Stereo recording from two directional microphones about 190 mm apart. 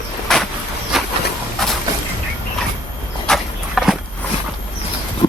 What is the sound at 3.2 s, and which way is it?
Horse, centre (ahead or behind).